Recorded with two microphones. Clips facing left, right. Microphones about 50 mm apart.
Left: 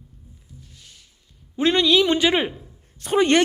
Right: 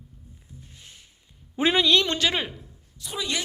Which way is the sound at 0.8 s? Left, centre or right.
Right.